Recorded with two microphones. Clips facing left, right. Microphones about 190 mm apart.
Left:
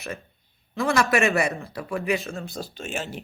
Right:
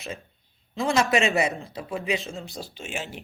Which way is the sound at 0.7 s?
15° right (ahead or behind).